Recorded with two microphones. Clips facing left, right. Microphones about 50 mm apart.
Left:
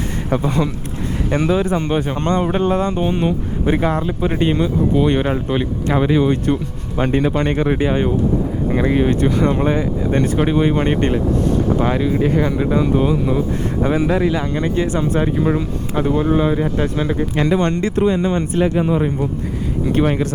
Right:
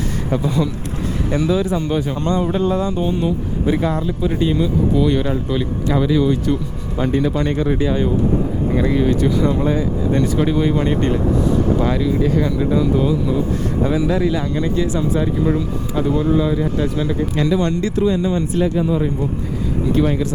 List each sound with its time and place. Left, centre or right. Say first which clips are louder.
0.3 s speech: left 1 dB; left